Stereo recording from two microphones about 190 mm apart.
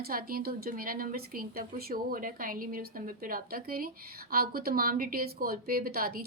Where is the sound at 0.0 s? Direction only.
50° right (ahead or behind).